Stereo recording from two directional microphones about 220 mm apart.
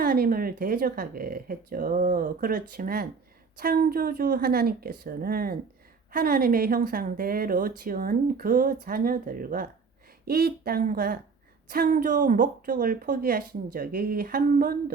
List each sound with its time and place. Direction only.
0.0 s a woman's voice: 40° right (ahead or behind)